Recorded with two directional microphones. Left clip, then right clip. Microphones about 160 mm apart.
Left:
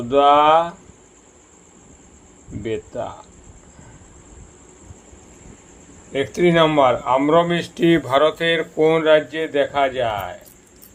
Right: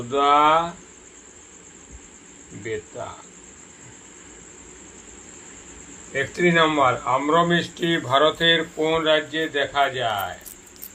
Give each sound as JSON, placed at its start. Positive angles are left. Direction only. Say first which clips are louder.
{"t": 0.1, "sound": "speech", "louder": "left 4 dB", "side_deg": 80}
{"t": 6.1, "sound": "speech", "louder": "left 3 dB", "side_deg": 90}